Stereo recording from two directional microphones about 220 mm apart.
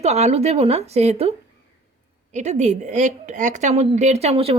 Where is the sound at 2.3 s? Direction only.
30° right (ahead or behind).